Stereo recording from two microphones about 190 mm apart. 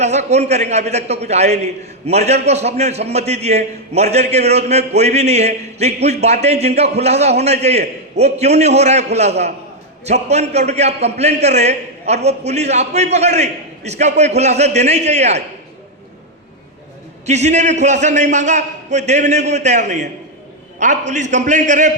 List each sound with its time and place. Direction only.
0.0 s a man's voice: 35° right (ahead or behind)
17.2 s a man's voice: 35° right (ahead or behind)